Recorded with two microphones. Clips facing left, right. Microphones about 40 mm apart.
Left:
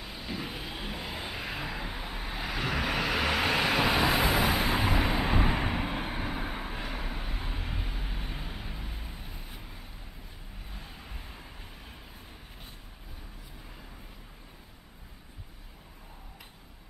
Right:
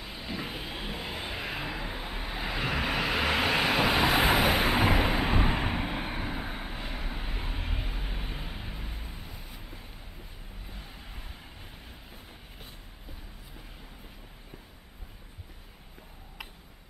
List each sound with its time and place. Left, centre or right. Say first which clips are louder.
0.0 s vehicle: right 1 dB; centre
4.2 s vehicle: right 2 dB; right
4.7 s a sound: right 3 dB; right
5.1 s vehicle: even; centre